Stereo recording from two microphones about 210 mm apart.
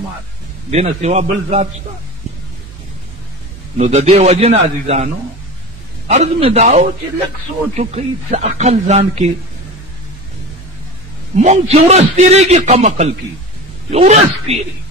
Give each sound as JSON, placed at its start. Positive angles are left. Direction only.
{"t": 0.7, "sound": "a man's voice", "side_deg": -30}
{"t": 3.7, "sound": "a man's voice", "side_deg": -35}
{"t": 11.3, "sound": "a man's voice", "side_deg": -35}